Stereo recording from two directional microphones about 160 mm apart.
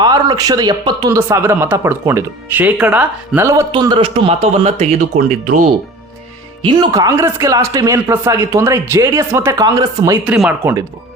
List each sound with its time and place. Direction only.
0.0 s speech: 25° right (ahead or behind); by 5.2 s 45° right (ahead or behind)
6.6 s speech: 30° right (ahead or behind)
10.2 s speech: 10° right (ahead or behind)